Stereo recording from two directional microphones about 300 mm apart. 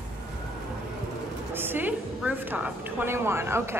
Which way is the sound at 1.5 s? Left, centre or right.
Centre.